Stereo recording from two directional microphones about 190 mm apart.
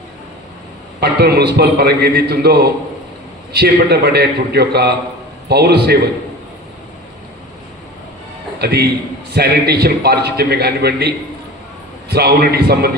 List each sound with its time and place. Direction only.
0.9 s a man's voice: 55° right (ahead or behind)
8.5 s a man's voice: 60° right (ahead or behind)